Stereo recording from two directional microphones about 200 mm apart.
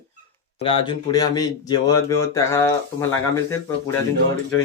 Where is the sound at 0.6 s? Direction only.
25° left (ahead or behind).